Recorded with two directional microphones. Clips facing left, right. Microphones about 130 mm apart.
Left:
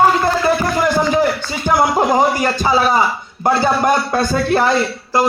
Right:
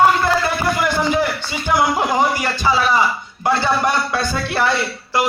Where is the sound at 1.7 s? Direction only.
40° left (ahead or behind).